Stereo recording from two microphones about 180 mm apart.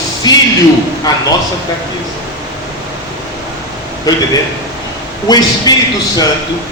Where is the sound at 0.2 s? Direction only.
20° left (ahead or behind).